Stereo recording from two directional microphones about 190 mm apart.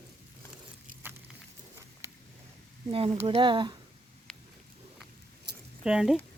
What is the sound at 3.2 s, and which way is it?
Speech, 25° right (ahead or behind).